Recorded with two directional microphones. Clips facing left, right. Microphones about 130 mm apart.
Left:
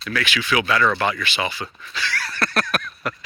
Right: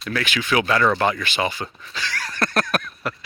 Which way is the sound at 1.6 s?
35° right (ahead or behind).